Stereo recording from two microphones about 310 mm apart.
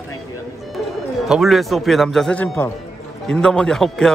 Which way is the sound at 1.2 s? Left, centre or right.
Centre.